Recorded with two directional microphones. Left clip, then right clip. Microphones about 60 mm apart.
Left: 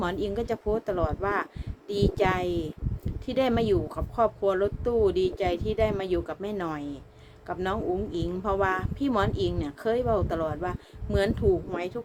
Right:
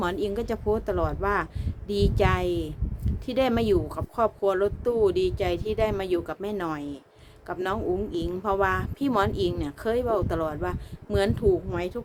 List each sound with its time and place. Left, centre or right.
0.0 s speech: right
9.0 s speech: right